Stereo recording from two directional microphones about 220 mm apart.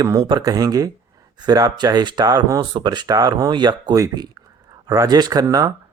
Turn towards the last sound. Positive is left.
turn(degrees=-15)  # may be behind; listen again after turning